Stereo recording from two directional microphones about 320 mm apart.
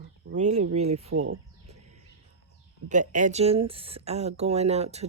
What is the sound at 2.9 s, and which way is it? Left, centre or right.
Speech, right.